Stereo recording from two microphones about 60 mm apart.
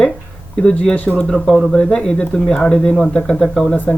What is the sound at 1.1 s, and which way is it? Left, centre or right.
Speech, centre.